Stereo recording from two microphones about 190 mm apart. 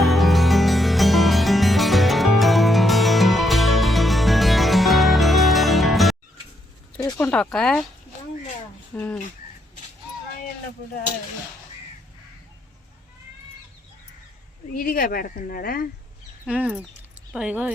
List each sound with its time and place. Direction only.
0.0 s music: centre (ahead or behind)
7.0 s a sound: 20° left (ahead or behind)
7.3 s speech: 5° left (ahead or behind)
9.0 s speech: 10° left (ahead or behind)
14.7 s speech: 50° left (ahead or behind)
16.5 s speech: 5° right (ahead or behind)